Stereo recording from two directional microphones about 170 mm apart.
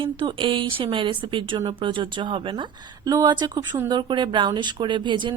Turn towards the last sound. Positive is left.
turn(degrees=-25)  # may be behind; listen again after turning